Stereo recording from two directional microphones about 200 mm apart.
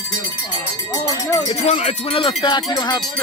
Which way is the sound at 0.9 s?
15° left (ahead or behind).